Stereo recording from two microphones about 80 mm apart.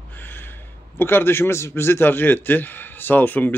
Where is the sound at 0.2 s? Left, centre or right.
Left.